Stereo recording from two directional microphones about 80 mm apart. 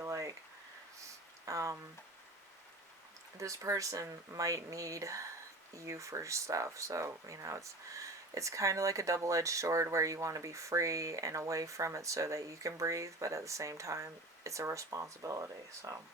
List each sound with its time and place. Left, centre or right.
0.0 s a sound: right
1.5 s speech: right
3.3 s speech: right